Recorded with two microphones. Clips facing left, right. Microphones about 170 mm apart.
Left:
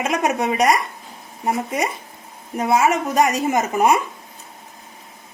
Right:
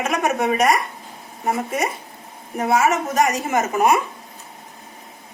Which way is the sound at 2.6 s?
20° left (ahead or behind).